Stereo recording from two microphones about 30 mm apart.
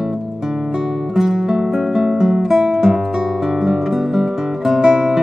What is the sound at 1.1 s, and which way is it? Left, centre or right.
Music, centre.